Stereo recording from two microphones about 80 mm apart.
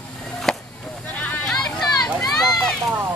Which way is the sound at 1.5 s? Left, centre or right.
Centre.